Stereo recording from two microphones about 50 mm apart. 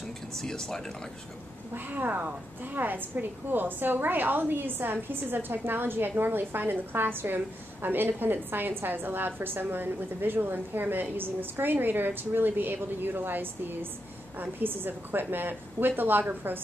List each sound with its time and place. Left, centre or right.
0.4 s speech: centre
1.9 s a woman's voice: right